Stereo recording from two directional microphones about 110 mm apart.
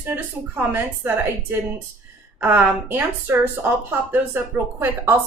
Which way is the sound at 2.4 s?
15° right (ahead or behind).